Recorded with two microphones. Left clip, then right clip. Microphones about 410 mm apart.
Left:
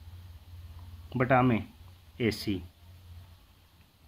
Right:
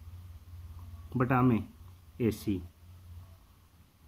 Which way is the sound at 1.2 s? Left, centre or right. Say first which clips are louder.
Left 3 dB; centre.